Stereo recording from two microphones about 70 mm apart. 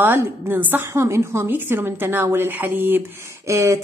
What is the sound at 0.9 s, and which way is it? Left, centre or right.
A woman's voice, right.